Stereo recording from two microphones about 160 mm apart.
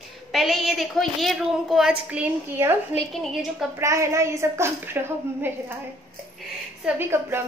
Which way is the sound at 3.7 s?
20° right (ahead or behind).